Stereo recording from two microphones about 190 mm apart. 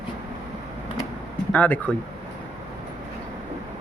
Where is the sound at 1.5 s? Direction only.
10° left (ahead or behind).